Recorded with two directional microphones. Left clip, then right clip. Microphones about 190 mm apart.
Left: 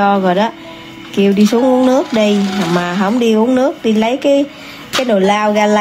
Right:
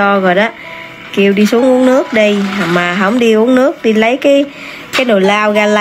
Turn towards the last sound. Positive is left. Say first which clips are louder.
# right 2 dB
turn(degrees=-5)  # may be behind; listen again after turning